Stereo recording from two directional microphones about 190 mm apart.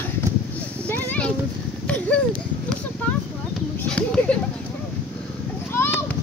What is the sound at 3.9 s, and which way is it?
Speech, 5° left (ahead or behind).